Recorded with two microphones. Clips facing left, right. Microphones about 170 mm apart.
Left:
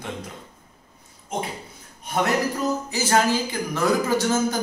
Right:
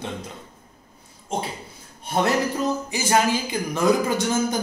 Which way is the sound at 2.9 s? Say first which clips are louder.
Left 1 dB; 15° right (ahead or behind).